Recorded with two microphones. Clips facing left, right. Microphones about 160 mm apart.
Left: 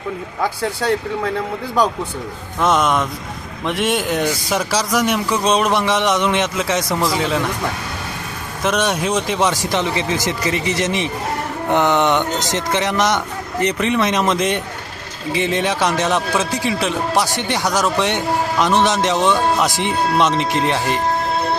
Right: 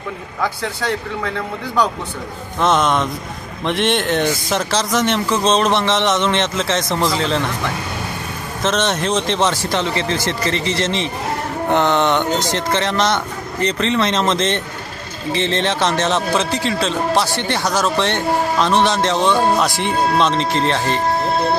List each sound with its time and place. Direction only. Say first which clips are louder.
2.6 s a man's voice: even; 10° left (ahead or behind)
8.6 s a man's voice: even; 10° left (ahead or behind)
16.3 s speech: right 1 dB; 20° right (ahead or behind)
16.6 s a man's voice: right 1 dB; 15° left (ahead or behind)
19.1 s speech: even; 15° right (ahead or behind)
19.6 s a man's voice: right 1 dB; 15° left (ahead or behind)